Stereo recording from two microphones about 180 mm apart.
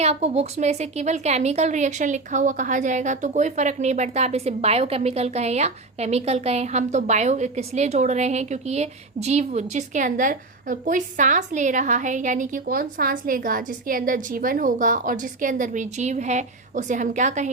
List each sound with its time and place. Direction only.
0.0 s a woman's voice: 35° right (ahead or behind)